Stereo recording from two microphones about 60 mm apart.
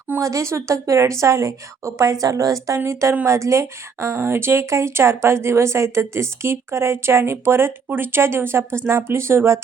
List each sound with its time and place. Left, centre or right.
0.2 s a woman's voice: right